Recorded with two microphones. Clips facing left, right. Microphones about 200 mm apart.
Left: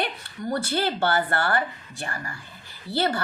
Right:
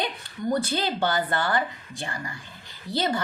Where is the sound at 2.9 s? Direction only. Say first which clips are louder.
Left 1 dB; 15° right (ahead or behind).